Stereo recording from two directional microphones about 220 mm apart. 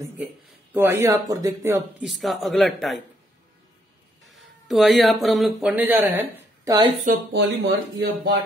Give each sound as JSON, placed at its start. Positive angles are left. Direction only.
{"t": 0.7, "sound": "speech", "side_deg": -10}
{"t": 2.0, "sound": "a man's voice", "side_deg": 0}
{"t": 4.3, "sound": "speech", "side_deg": 0}
{"t": 7.1, "sound": "speech", "side_deg": -50}